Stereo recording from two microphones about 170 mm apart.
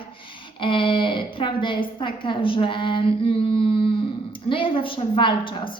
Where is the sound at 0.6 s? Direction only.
30° left (ahead or behind).